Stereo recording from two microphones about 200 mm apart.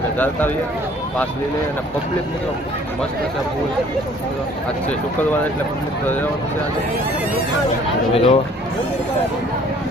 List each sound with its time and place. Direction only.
8.1 s speech: 30° left (ahead or behind)